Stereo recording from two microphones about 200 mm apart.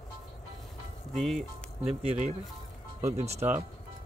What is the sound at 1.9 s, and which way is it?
Speech, 35° right (ahead or behind).